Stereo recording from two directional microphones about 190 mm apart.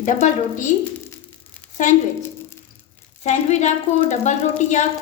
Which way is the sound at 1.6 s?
10° left (ahead or behind).